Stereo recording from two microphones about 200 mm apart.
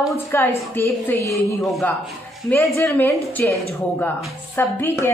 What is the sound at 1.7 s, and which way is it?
A woman's voice, centre (ahead or behind).